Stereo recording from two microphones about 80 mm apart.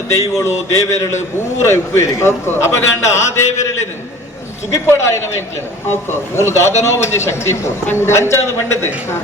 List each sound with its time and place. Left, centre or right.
0.1 s a man's voice: left